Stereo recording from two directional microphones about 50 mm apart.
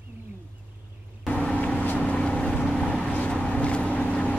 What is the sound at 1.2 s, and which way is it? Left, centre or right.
Vehicle, left.